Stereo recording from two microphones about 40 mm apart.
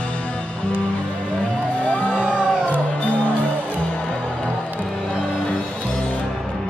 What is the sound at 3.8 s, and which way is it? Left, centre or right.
Music, left.